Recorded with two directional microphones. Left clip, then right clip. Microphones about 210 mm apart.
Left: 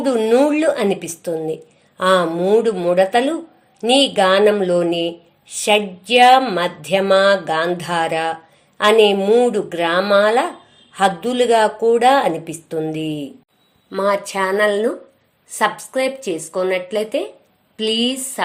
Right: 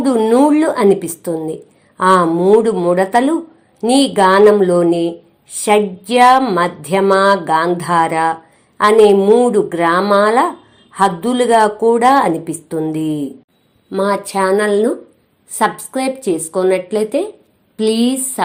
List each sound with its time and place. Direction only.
0.1 s a woman's voice: 5° left (ahead or behind)
17.8 s a woman's voice: 20° left (ahead or behind)
18.1 s a woman's voice: centre (ahead or behind)